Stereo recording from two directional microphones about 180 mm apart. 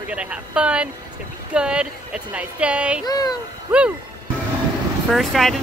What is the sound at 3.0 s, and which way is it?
Music, 20° left (ahead or behind).